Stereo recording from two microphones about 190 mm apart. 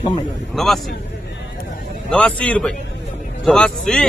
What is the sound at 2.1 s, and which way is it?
Speech, 5° left (ahead or behind).